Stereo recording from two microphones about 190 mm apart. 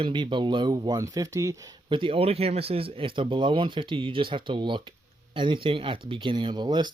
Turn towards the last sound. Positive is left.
turn(degrees=-25)  # may be behind; listen again after turning